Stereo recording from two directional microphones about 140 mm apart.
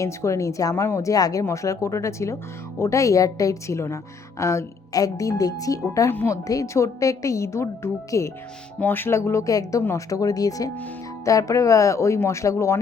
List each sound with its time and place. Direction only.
0.0 s speech: 20° left (ahead or behind)